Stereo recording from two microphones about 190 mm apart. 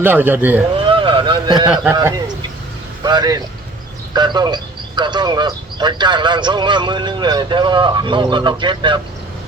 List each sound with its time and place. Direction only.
0.0 s speech: 10° right (ahead or behind)
0.8 s a sound: 25° right (ahead or behind)
1.7 s a man's voice: 5° right (ahead or behind)
2.0 s speech: 20° right (ahead or behind)